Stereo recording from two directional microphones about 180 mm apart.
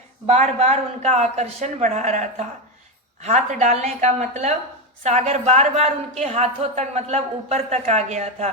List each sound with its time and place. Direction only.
0.3 s a woman's voice: 40° right (ahead or behind)